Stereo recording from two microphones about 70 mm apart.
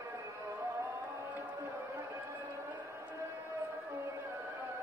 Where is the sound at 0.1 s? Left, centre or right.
Right.